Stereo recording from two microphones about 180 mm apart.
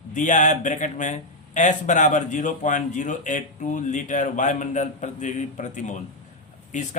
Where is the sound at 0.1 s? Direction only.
45° left (ahead or behind).